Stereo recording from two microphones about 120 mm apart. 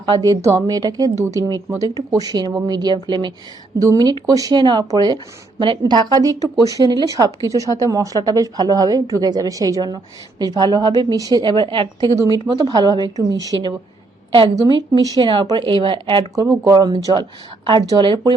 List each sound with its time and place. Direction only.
0.1 s speech: 30° right (ahead or behind)
14.8 s speech: 35° right (ahead or behind)
16.3 s speech: 30° right (ahead or behind)